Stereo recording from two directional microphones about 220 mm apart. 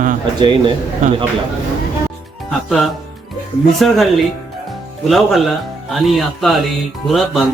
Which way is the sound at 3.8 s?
Centre (ahead or behind).